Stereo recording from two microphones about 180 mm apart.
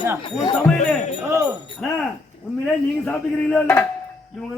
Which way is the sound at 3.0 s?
5° left (ahead or behind).